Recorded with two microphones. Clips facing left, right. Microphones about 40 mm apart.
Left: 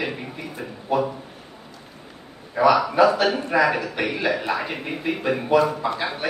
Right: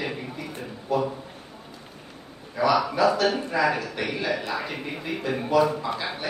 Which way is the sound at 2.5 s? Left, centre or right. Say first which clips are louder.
Left 5 dB; left.